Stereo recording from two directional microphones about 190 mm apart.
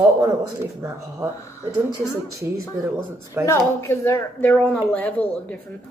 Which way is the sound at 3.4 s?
15° left (ahead or behind).